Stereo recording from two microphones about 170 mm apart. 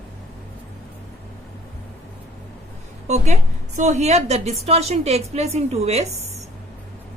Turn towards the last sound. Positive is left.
turn(degrees=-40)  # may be behind; listen again after turning